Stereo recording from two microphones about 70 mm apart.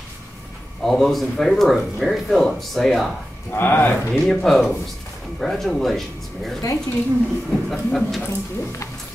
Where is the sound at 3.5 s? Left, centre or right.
Left.